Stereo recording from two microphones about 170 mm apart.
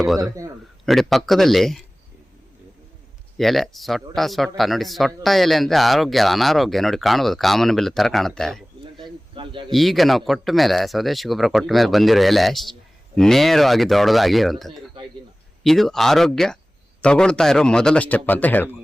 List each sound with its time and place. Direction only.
0.0 s speech: centre (ahead or behind)
3.3 s speech: centre (ahead or behind)
9.3 s speech: 30° right (ahead or behind)
9.7 s speech: centre (ahead or behind)